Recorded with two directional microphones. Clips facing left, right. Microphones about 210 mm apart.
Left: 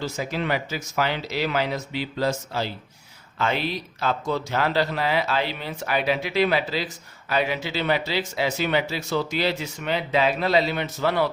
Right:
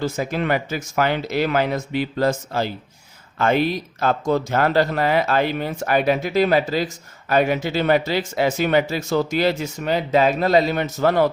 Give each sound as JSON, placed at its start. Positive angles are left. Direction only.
{"t": 0.0, "sound": "speech", "side_deg": -50}